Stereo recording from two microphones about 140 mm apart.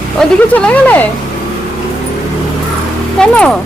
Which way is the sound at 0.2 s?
10° left (ahead or behind).